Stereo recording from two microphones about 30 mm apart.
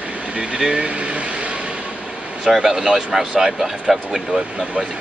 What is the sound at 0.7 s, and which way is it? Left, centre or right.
Vehicle, right.